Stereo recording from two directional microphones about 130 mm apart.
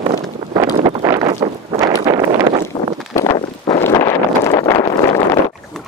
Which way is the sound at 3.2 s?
40° left (ahead or behind).